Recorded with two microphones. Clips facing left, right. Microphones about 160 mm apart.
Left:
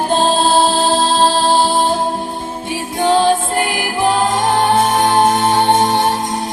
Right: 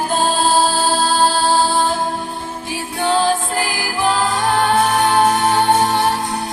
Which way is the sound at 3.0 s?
20° left (ahead or behind).